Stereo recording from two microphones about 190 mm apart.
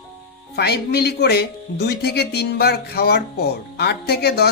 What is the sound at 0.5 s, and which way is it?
Speech, 55° left (ahead or behind).